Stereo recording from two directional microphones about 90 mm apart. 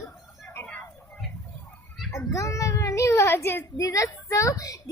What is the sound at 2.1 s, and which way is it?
A child's voice, 35° left (ahead or behind).